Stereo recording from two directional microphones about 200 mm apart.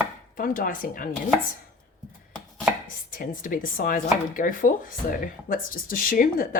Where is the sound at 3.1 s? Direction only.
45° left (ahead or behind).